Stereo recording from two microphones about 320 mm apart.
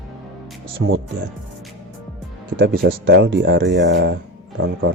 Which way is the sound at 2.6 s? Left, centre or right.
Right.